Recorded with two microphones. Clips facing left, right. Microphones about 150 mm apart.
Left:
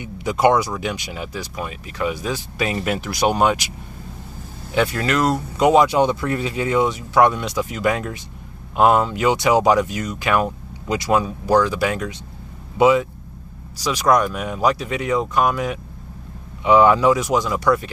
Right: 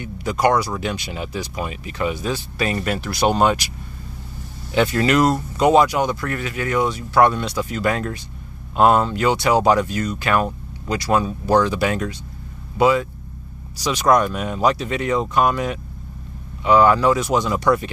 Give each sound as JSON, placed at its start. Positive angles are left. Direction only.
{"t": 0.0, "sound": "speech", "side_deg": 15}
{"t": 4.7, "sound": "speech", "side_deg": 0}
{"t": 5.3, "sound": "speech", "side_deg": 10}
{"t": 5.9, "sound": "speech", "side_deg": 25}
{"t": 12.7, "sound": "speech", "side_deg": 15}
{"t": 14.2, "sound": "speech", "side_deg": 5}
{"t": 16.6, "sound": "speech", "side_deg": 15}